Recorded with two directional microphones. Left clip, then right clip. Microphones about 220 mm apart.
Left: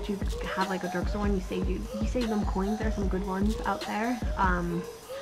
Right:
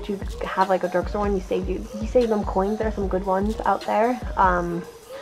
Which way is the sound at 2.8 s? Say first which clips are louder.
Right 8 dB; 25° right (ahead or behind).